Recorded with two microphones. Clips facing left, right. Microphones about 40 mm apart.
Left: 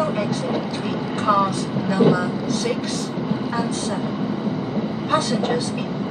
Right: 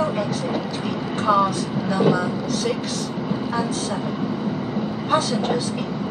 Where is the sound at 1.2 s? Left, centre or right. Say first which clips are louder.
Even; left.